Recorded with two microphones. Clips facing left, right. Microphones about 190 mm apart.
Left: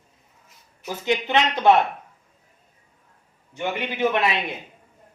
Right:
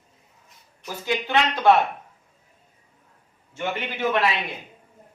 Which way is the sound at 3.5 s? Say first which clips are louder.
Left 1 dB; 15° left (ahead or behind).